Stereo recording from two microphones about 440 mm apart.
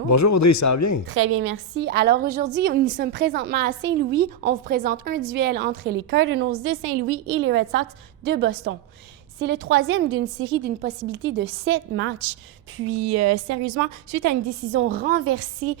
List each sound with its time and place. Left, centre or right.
0.1 s a man's voice: left
1.1 s a woman's voice: right
14.7 s a woman's voice: right